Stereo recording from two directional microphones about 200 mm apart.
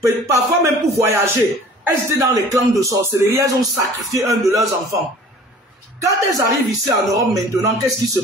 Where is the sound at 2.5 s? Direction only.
15° right (ahead or behind).